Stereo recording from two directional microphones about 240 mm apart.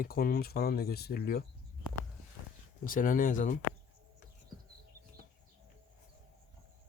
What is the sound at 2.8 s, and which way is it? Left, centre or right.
Speech, left.